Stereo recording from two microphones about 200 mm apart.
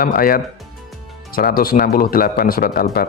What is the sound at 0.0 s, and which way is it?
Speech, 45° left (ahead or behind).